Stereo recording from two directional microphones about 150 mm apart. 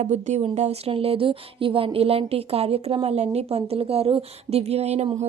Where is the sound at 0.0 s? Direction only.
50° right (ahead or behind).